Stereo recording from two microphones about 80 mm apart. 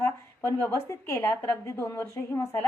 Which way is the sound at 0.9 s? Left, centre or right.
Left.